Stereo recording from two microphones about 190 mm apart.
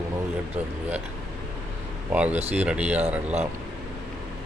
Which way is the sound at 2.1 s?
10° right (ahead or behind).